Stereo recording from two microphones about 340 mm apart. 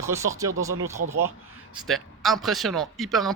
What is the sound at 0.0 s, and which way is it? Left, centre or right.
Speech, centre.